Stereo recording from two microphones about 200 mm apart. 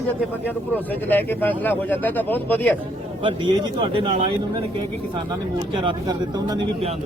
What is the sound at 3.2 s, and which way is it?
Speech, 25° right (ahead or behind).